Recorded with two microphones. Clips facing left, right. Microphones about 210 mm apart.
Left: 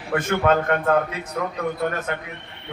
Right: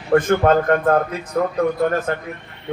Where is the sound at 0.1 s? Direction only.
40° right (ahead or behind).